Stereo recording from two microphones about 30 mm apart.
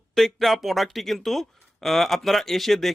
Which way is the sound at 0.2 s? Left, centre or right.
Centre.